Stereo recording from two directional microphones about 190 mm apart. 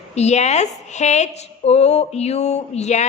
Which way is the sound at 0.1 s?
35° left (ahead or behind).